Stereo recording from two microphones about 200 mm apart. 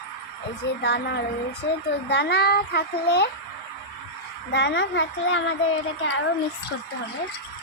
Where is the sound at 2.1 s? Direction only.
55° left (ahead or behind).